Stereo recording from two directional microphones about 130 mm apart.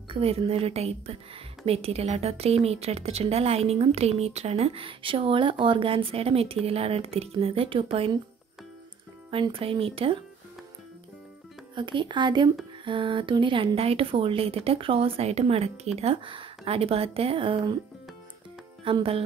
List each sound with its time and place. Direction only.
0.1 s speech: 50° right (ahead or behind)
9.3 s speech: 40° right (ahead or behind)
11.7 s speech: 40° right (ahead or behind)
18.9 s speech: 45° right (ahead or behind)